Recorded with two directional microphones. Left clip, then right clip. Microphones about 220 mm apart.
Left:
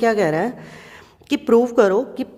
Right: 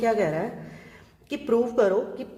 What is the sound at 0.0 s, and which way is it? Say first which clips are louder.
A woman's voice: left 6 dB; 40° left (ahead or behind).